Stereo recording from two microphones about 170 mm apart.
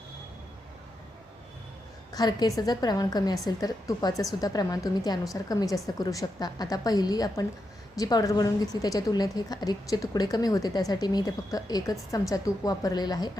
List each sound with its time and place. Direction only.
2.1 s a woman's voice: 25° left (ahead or behind)